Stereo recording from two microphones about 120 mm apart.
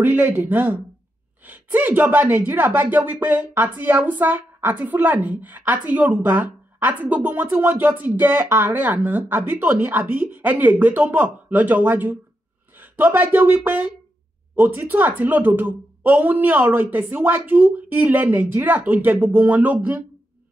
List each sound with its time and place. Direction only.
0.0 s speech: 15° right (ahead or behind)